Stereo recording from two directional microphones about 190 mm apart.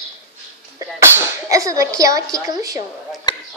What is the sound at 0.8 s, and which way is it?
Speech, 15° right (ahead or behind).